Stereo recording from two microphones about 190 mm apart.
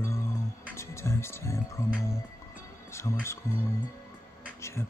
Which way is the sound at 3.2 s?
15° left (ahead or behind).